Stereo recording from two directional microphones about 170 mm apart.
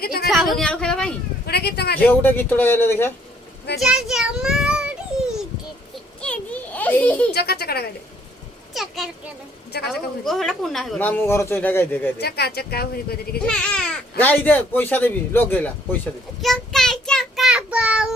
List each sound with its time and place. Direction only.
0.0 s a sound: 65° left (ahead or behind)
0.5 s speech: 5° left (ahead or behind)
1.5 s speech: 70° left (ahead or behind)
2.0 s speech: 10° left (ahead or behind)
3.8 s a child's voice: centre (ahead or behind)
6.2 s a sound: 10° left (ahead or behind)
7.3 s speech: 65° left (ahead or behind)
8.7 s a sound: centre (ahead or behind)
9.8 s speech: centre (ahead or behind)
12.2 s speech: 70° left (ahead or behind)
13.4 s speech: 5° left (ahead or behind)
16.4 s child singing: centre (ahead or behind)